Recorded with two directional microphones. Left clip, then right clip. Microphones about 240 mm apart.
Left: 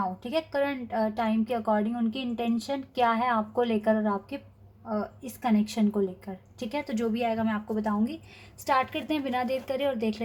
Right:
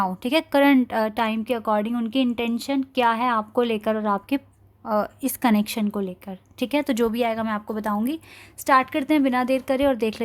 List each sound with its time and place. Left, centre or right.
0.2 s a woman's voice: right